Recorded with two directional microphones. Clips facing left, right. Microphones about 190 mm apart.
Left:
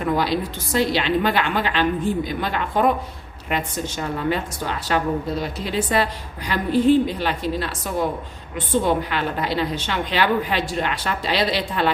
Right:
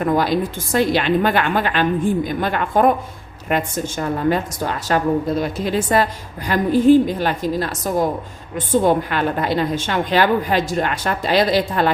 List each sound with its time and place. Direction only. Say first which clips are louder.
0.0 s a woman's voice: right 4 dB; 50° right (ahead or behind)